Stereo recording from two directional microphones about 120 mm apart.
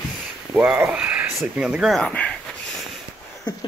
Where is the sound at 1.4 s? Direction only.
5° right (ahead or behind).